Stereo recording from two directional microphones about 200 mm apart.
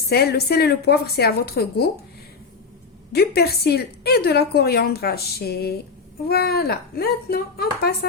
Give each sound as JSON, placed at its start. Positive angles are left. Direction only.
{"t": 0.1, "sound": "a woman's voice", "side_deg": 50}
{"t": 3.1, "sound": "a woman's voice", "side_deg": 50}